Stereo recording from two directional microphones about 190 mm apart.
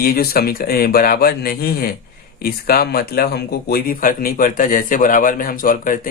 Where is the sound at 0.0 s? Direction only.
50° left (ahead or behind).